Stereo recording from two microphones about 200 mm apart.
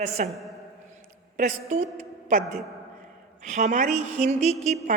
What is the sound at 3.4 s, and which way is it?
A woman's voice, 35° right (ahead or behind).